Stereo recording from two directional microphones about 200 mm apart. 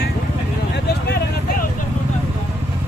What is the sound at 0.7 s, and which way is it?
Vehicle, 55° left (ahead or behind).